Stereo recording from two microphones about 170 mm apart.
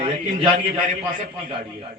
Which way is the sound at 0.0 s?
35° right (ahead or behind).